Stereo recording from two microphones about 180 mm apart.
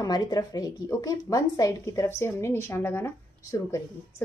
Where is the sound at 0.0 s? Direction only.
20° left (ahead or behind).